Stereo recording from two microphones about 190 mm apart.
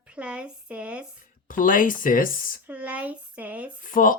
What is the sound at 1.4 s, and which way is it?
Speech, 45° left (ahead or behind).